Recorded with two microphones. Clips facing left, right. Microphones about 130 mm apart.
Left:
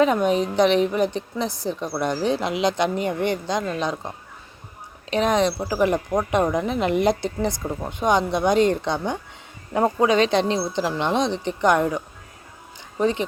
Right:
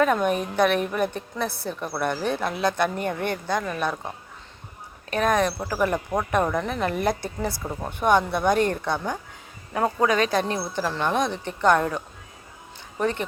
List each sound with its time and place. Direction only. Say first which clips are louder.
0.0 s a woman's voice: left 3 dB; 20° left (ahead or behind)
5.1 s a woman's voice: left 2 dB; 20° left (ahead or behind)